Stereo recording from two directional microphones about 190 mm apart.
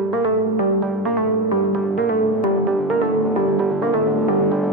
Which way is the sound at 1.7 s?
50° left (ahead or behind).